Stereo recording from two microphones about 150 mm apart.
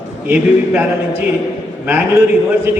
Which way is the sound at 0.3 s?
10° right (ahead or behind).